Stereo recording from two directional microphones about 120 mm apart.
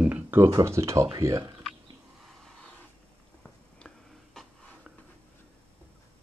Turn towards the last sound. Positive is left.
turn(degrees=0)  # may be behind; listen again after turning